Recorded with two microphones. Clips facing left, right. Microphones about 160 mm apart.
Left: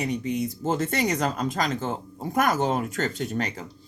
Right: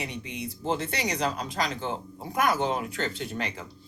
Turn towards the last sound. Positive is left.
turn(degrees=45)  # may be behind; listen again after turning